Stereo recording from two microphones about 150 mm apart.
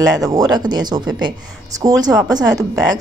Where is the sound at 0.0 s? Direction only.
25° right (ahead or behind).